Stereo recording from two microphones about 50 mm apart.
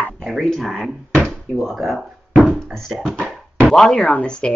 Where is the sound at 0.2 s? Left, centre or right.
Centre.